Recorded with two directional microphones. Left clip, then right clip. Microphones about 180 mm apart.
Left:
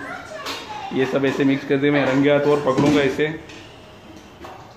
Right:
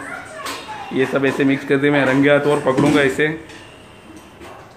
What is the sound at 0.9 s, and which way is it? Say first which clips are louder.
Speech: right 2 dB; 15° right (ahead or behind).